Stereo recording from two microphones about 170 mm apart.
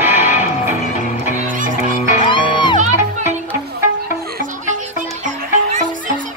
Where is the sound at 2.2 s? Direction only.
25° left (ahead or behind).